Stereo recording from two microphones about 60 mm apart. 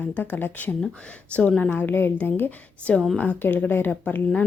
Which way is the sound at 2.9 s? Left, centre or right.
Left.